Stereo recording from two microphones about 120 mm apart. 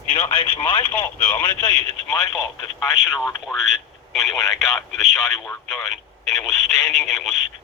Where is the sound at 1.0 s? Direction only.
35° left (ahead or behind).